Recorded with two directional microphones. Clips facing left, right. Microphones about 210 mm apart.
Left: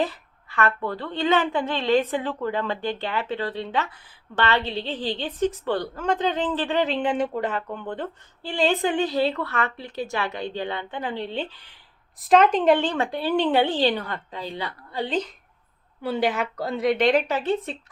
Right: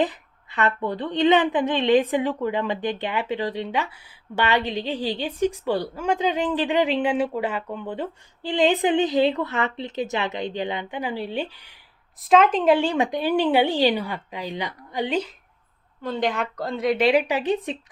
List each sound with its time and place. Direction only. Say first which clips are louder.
0.0 s a woman's voice: right 2 dB; 20° right (ahead or behind)
12.2 s a woman's voice: even; centre (ahead or behind)
16.0 s a woman's voice: left 1 dB; 5° left (ahead or behind); by 17.7 s 15° right (ahead or behind)